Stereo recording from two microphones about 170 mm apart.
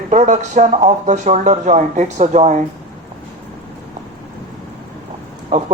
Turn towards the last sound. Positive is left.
turn(degrees=-50)  # may be behind; listen again after turning